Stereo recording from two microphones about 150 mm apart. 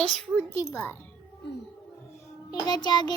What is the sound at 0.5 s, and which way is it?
Speech, 15° left (ahead or behind).